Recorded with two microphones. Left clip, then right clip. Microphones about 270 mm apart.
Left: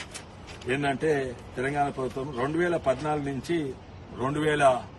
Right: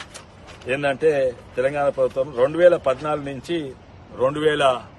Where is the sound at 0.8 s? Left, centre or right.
Right.